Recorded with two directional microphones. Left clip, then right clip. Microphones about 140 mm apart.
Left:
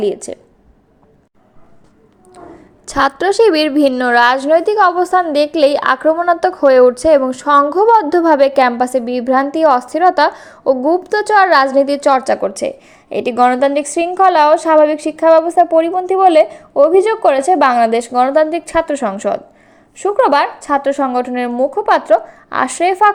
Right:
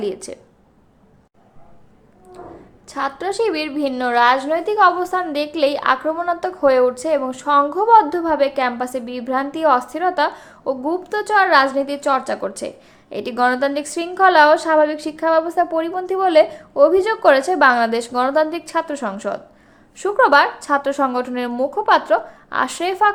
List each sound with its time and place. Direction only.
0.0 s a woman's voice: 25° left (ahead or behind)
2.8 s a woman's voice: 65° left (ahead or behind); by 12.4 s 45° left (ahead or behind)
12.4 s a woman's voice: 35° left (ahead or behind)
20.0 s a woman's voice: 20° left (ahead or behind)